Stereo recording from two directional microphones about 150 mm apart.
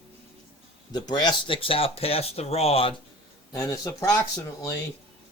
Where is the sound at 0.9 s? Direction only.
30° left (ahead or behind).